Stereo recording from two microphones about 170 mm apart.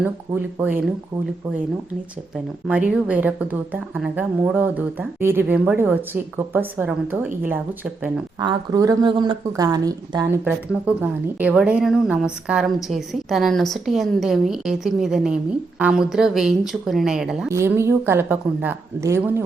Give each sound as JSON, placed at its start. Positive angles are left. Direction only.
{"t": 0.0, "sound": "speech", "side_deg": -10}
{"t": 2.6, "sound": "speech", "side_deg": -5}
{"t": 8.4, "sound": "a woman's voice", "side_deg": -25}
{"t": 17.5, "sound": "speech", "side_deg": -15}